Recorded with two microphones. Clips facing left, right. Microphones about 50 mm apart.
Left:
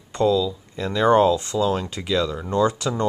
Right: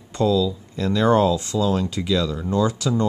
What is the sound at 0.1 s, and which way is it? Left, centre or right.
Speech, centre.